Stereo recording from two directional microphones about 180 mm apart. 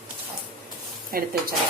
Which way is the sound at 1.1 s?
55° right (ahead or behind).